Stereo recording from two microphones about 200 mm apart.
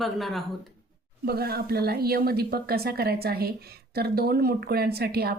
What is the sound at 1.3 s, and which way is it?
Speech, 50° right (ahead or behind).